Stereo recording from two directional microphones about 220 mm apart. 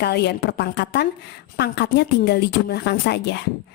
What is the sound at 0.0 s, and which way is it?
A woman's voice, 50° left (ahead or behind).